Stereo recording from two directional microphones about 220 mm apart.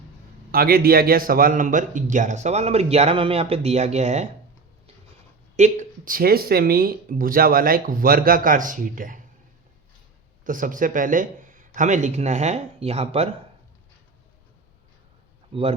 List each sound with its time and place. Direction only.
0.5 s a man's voice: 45° right (ahead or behind)
5.5 s a man's voice: 35° right (ahead or behind)
10.4 s a man's voice: 40° right (ahead or behind)